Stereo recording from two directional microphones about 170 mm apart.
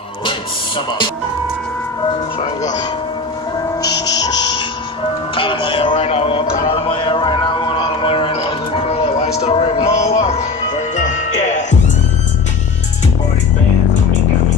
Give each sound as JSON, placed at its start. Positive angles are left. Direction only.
{"t": 0.2, "sound": "music", "side_deg": 30}
{"t": 3.8, "sound": "music", "side_deg": 25}